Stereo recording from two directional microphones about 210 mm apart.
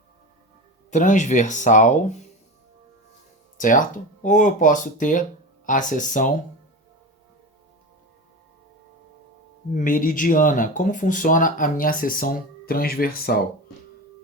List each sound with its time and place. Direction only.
0.9 s speech: 35° left (ahead or behind)
3.6 s speech: 40° left (ahead or behind)
9.7 s speech: 40° left (ahead or behind)